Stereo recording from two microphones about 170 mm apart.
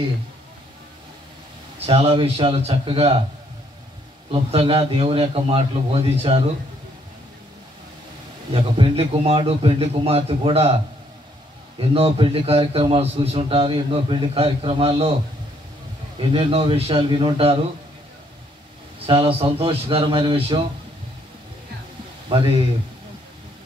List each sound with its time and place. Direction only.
1.9 s a man's voice: 35° right (ahead or behind)
4.3 s a man's voice: 35° right (ahead or behind)
8.5 s a man's voice: 30° right (ahead or behind)
11.9 s a man's voice: 35° right (ahead or behind)
16.2 s a man's voice: 35° right (ahead or behind)
19.0 s a man's voice: 30° right (ahead or behind)
22.3 s a man's voice: 30° right (ahead or behind)